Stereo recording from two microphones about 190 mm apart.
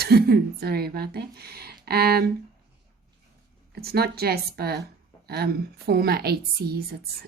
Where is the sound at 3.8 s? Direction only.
55° right (ahead or behind).